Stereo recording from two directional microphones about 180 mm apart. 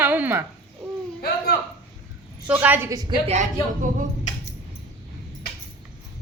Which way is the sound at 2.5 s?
10° right (ahead or behind).